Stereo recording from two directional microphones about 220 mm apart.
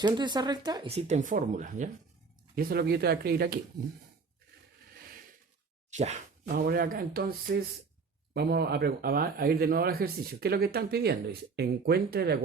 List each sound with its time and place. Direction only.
0.0 s speech: 20° right (ahead or behind); by 3.6 s 45° right (ahead or behind)
5.9 s speech: 30° right (ahead or behind)